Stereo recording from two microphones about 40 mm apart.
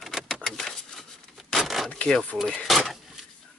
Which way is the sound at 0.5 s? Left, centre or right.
Centre.